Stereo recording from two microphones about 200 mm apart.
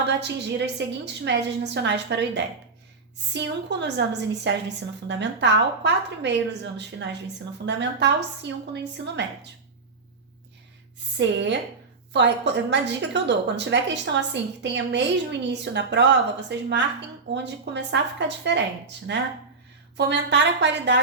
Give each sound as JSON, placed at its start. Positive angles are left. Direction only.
{"t": 0.1, "sound": "a woman's voice", "side_deg": -60}
{"t": 12.1, "sound": "a woman's voice", "side_deg": -60}